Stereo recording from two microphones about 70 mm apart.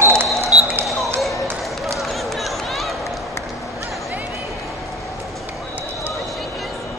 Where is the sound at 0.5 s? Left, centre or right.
Centre.